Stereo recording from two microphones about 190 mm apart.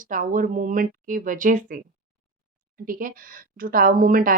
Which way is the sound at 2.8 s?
45° right (ahead or behind).